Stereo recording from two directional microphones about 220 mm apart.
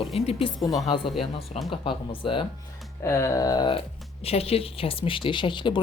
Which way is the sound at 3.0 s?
10° left (ahead or behind).